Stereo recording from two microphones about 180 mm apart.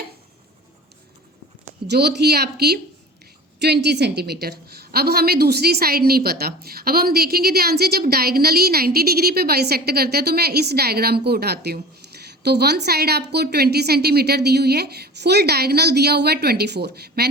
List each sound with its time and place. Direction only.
1.9 s a woman's voice: 65° right (ahead or behind)